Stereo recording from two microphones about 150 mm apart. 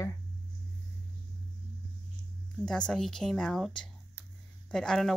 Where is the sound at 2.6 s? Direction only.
5° left (ahead or behind).